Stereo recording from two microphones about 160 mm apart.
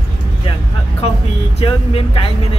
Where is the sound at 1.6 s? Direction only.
35° left (ahead or behind).